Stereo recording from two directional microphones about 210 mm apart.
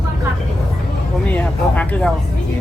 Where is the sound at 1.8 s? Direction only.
5° left (ahead or behind).